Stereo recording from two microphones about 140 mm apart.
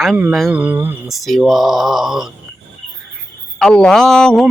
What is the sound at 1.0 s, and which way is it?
Speech, centre (ahead or behind).